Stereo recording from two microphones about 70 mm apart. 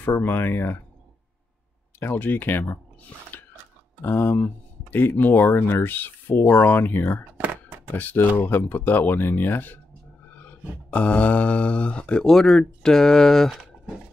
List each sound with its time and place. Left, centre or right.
0.0 s speech: left
2.0 s speech: left
4.0 s speech: left
7.3 s a sound: right
7.9 s speech: left
10.3 s mantra: left
12.3 s speech: centre